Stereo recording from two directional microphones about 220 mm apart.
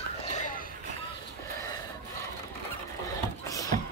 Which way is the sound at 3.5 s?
15° left (ahead or behind).